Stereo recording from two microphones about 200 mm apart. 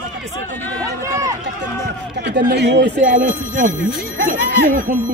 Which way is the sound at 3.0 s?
40° right (ahead or behind).